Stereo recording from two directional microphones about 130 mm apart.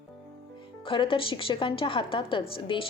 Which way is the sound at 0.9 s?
40° left (ahead or behind).